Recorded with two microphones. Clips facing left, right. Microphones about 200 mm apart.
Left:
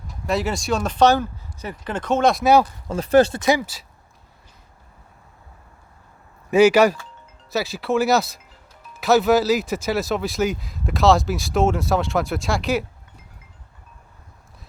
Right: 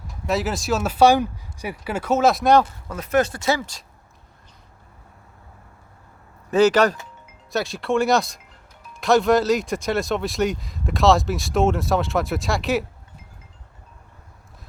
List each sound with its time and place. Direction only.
0.3 s speech: centre (ahead or behind)
2.9 s speech: 30° left (ahead or behind)
3.4 s speech: 15° left (ahead or behind)
6.5 s speech: 10° left (ahead or behind)